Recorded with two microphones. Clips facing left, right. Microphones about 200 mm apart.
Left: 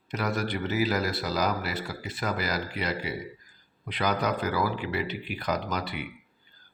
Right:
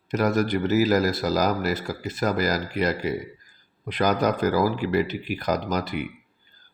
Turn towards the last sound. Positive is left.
turn(degrees=-45)  # may be behind; listen again after turning